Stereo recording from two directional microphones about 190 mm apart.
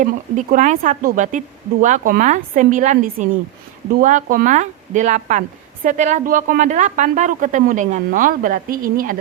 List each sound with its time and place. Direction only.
0.0 s a woman's voice: 40° right (ahead or behind)